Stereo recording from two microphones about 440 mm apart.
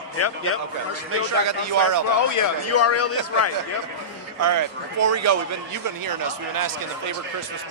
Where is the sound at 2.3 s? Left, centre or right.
Left.